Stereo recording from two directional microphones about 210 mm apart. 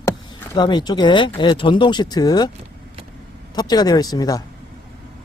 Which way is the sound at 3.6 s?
20° left (ahead or behind).